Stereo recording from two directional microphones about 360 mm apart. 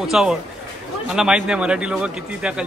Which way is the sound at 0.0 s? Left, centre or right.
Centre.